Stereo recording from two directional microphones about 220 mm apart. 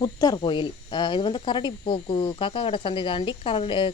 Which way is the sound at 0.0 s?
15° left (ahead or behind).